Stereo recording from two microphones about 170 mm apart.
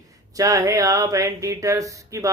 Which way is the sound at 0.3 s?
20° right (ahead or behind).